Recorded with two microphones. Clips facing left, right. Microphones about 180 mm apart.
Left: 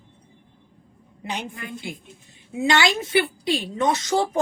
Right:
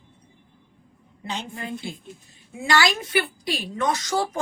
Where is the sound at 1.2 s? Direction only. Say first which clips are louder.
Left 1 dB; 15° left (ahead or behind).